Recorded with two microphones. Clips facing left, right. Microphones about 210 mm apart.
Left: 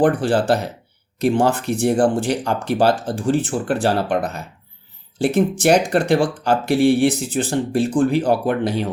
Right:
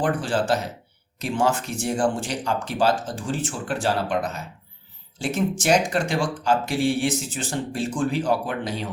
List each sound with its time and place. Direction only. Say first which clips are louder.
0.0 s speech: left 7 dB; 60° left (ahead or behind)